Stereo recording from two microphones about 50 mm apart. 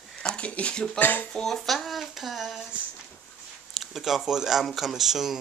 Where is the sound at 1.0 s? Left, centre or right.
Left.